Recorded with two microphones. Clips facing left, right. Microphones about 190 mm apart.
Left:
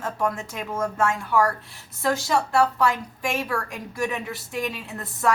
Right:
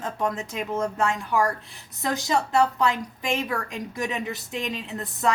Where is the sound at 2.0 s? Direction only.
15° right (ahead or behind).